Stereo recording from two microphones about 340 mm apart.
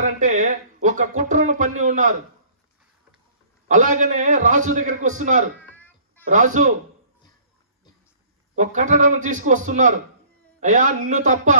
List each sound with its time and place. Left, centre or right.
0.0 s speech: right
3.6 s speech: right
5.6 s a sound: centre
6.3 s speech: right
8.5 s speech: right